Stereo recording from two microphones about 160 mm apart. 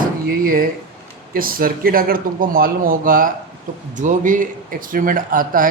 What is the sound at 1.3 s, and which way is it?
Speech, 65° right (ahead or behind).